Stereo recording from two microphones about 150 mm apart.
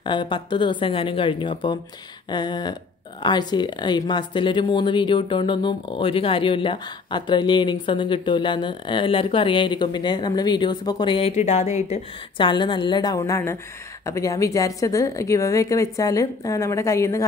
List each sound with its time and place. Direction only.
0.0 s a woman's voice: 35° left (ahead or behind)